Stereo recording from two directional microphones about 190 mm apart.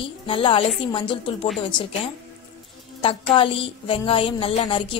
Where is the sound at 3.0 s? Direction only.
30° left (ahead or behind).